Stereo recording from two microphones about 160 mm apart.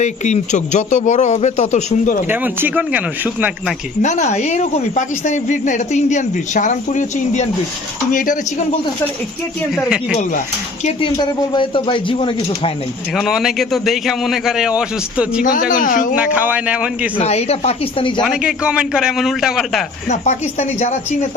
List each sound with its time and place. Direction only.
0.0 s speech: 45° left (ahead or behind)
2.3 s speech: 10° right (ahead or behind)
4.0 s speech: 45° left (ahead or behind)
9.7 s a man's voice: centre (ahead or behind)
11.0 s speech: 30° left (ahead or behind)
13.1 s a man's voice: centre (ahead or behind)
15.7 s speech: 60° left (ahead or behind)
16.1 s speech: 10° right (ahead or behind)
17.2 s speech: 40° left (ahead or behind)
18.2 s a man's voice: 5° right (ahead or behind)
20.1 s speech: 45° left (ahead or behind)